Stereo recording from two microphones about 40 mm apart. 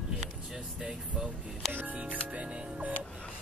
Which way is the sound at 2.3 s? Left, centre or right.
Right.